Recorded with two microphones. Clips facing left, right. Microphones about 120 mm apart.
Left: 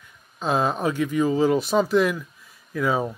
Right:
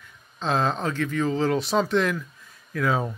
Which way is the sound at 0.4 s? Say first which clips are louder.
Left 2 dB; 10° left (ahead or behind).